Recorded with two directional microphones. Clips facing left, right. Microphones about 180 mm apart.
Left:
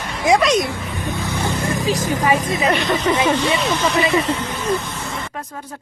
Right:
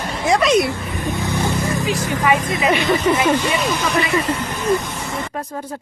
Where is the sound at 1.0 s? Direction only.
20° right (ahead or behind).